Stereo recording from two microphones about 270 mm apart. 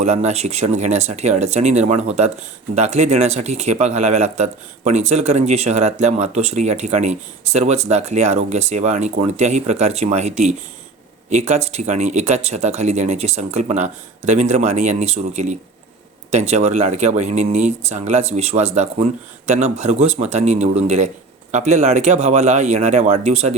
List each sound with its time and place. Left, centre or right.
0.0 s speech: right